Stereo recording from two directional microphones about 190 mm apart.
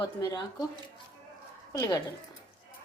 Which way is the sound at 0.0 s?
20° left (ahead or behind).